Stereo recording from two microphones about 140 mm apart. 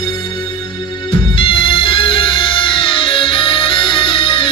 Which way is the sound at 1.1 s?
35° left (ahead or behind).